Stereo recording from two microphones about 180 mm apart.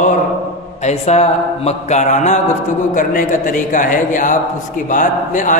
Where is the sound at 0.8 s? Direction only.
35° left (ahead or behind).